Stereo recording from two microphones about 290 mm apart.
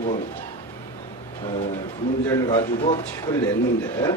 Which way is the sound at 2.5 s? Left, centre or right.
Centre.